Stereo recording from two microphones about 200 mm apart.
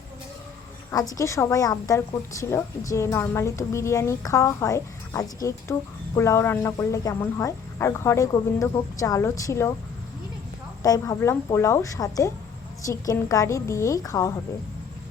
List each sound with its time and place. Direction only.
0.9 s a woman's voice: 15° left (ahead or behind)
10.8 s a woman's voice: 20° left (ahead or behind)